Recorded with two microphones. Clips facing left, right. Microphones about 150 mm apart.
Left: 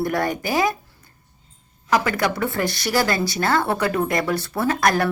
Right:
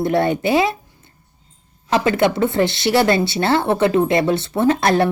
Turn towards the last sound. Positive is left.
turn(degrees=-25)  # may be behind; listen again after turning